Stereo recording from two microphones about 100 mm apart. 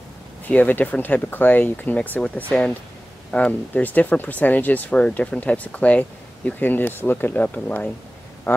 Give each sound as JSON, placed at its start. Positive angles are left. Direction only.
{"t": 0.5, "sound": "speech", "side_deg": 15}